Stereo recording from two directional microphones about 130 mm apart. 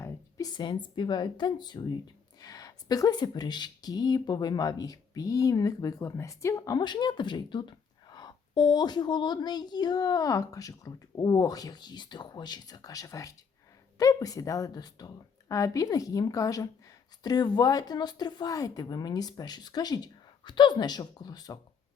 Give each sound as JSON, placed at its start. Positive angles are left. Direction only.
{"t": 0.0, "sound": "a woman's voice", "side_deg": 25}